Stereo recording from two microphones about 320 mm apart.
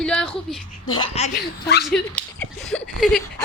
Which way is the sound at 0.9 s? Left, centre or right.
Centre.